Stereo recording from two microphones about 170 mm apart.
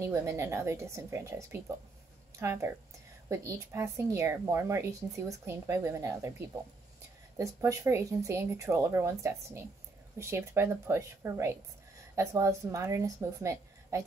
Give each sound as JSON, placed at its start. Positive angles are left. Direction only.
{"t": 0.0, "sound": "speech", "side_deg": -20}
{"t": 7.3, "sound": "speech", "side_deg": -15}